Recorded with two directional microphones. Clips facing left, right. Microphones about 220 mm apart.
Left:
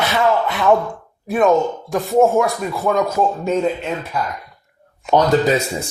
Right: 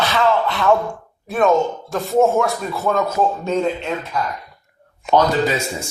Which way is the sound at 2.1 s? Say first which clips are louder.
Left 1 dB; 15° left (ahead or behind).